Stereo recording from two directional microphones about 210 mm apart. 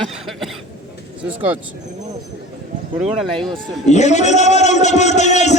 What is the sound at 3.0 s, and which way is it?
Speech, 30° right (ahead or behind).